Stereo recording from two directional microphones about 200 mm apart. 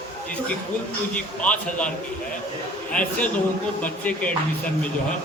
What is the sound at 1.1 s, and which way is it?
Speech, 5° left (ahead or behind).